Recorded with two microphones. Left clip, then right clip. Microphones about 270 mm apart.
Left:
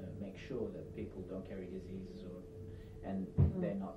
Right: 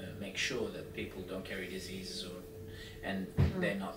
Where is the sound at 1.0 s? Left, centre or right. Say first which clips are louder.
Right 5 dB; centre.